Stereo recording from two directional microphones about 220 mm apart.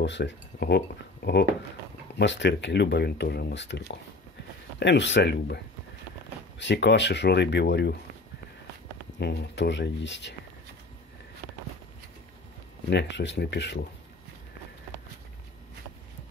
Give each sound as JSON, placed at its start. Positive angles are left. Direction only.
{"t": 0.0, "sound": "speech", "side_deg": 55}
{"t": 6.6, "sound": "speech", "side_deg": 55}
{"t": 9.2, "sound": "speech", "side_deg": 50}
{"t": 12.9, "sound": "speech", "side_deg": 55}